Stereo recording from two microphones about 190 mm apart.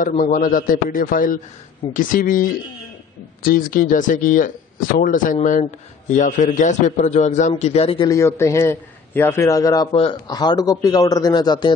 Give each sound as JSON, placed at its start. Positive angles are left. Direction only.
{"t": 0.2, "sound": "a man's voice", "side_deg": 45}
{"t": 8.1, "sound": "a man's voice", "side_deg": 15}